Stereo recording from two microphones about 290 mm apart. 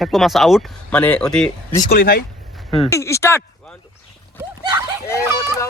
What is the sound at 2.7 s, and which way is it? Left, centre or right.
Speech, centre.